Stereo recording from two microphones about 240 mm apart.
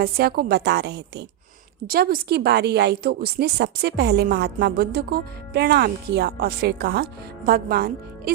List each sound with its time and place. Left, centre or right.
0.0 s a woman's voice: right